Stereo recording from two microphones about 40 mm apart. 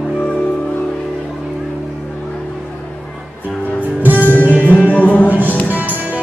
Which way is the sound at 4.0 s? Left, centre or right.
Right.